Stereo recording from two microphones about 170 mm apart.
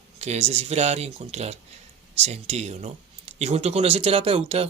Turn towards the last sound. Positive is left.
turn(degrees=-35)  # may be behind; listen again after turning